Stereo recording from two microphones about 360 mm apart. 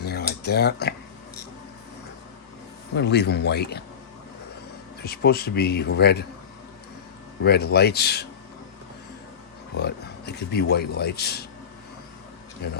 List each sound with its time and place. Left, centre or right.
0.0 s a sound: left
2.9 s a man's voice: left
5.0 s a man's voice: left
7.4 s a man's voice: left
9.7 s a man's voice: left
12.6 s a man's voice: left